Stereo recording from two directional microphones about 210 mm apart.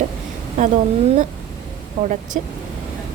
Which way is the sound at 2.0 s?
40° right (ahead or behind).